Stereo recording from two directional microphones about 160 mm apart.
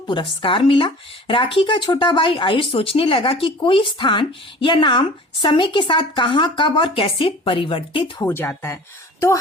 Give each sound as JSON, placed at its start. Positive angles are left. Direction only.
{"t": 0.1, "sound": "speech", "side_deg": 30}
{"t": 8.2, "sound": "speech", "side_deg": 15}